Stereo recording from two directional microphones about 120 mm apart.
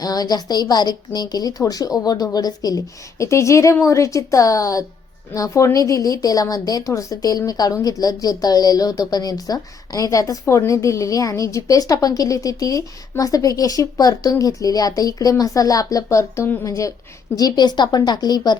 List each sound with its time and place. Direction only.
0.0 s a woman's voice: 35° left (ahead or behind)